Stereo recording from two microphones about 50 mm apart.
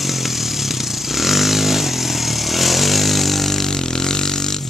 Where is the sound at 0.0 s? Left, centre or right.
Centre.